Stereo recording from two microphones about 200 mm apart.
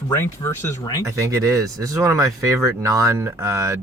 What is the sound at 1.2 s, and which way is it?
Speech, 15° right (ahead or behind).